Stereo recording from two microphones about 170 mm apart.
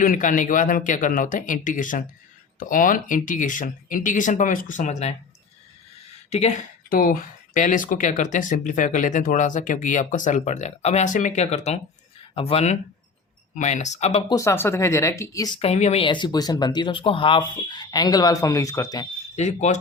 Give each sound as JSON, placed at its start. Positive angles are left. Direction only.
{"t": 0.0, "sound": "speech", "side_deg": 50}
{"t": 6.9, "sound": "speech", "side_deg": 55}
{"t": 14.3, "sound": "speech", "side_deg": 20}
{"t": 15.5, "sound": "speech", "side_deg": 40}
{"t": 19.4, "sound": "speech", "side_deg": 45}